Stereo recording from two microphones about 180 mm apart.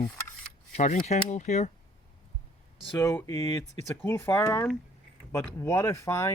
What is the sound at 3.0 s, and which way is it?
Speech, 15° left (ahead or behind).